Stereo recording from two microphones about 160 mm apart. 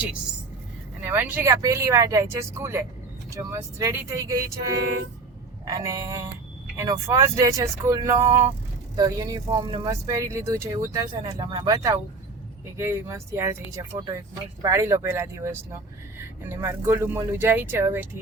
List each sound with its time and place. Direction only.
1.0 s speech: 10° right (ahead or behind)